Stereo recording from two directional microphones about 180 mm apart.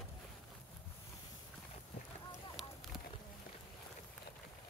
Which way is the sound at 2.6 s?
Centre (ahead or behind).